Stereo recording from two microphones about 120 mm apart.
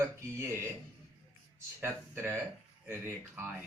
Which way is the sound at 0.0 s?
20° right (ahead or behind).